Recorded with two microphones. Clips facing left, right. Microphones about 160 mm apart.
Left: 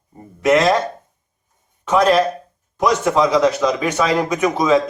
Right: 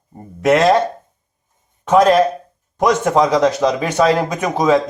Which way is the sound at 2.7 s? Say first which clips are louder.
Right 2 dB; 45° right (ahead or behind).